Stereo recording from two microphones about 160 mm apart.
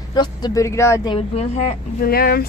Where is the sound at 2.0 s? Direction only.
70° left (ahead or behind).